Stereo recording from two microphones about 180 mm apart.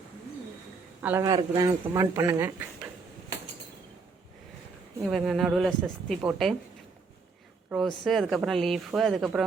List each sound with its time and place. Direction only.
1.0 s speech: 15° right (ahead or behind)
5.1 s speech: centre (ahead or behind)
7.7 s speech: centre (ahead or behind)